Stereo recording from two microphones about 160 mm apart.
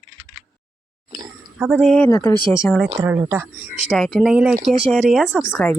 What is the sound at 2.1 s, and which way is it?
Speech, 20° left (ahead or behind).